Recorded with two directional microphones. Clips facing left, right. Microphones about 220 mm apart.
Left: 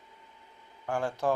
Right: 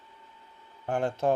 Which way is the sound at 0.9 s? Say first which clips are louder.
Right 3 dB; 20° right (ahead or behind).